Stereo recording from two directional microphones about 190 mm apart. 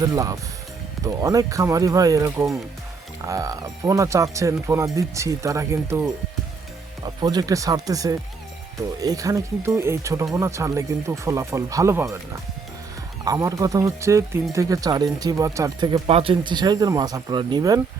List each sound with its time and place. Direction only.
0.0 s speech: 20° right (ahead or behind)
7.2 s speech: 20° right (ahead or behind)